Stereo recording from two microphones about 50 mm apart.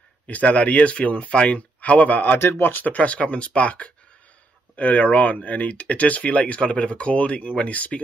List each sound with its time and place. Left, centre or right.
0.3 s speech: left
2.5 s speech: left
2.8 s speech: left